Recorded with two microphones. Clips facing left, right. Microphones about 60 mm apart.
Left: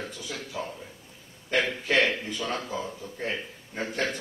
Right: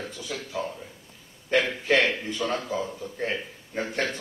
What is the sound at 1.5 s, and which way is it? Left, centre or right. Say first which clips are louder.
A man's voice: right 2 dB; right.